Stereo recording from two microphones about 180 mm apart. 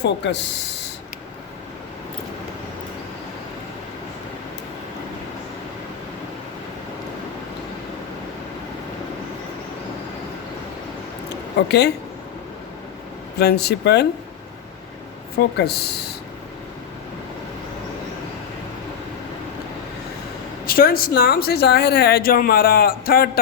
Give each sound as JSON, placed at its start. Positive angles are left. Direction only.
{"t": 0.0, "sound": "speech", "side_deg": 75}
{"t": 11.7, "sound": "speech", "side_deg": 65}
{"t": 13.4, "sound": "speech", "side_deg": 65}
{"t": 15.5, "sound": "speech", "side_deg": 65}
{"t": 20.7, "sound": "speech", "side_deg": 55}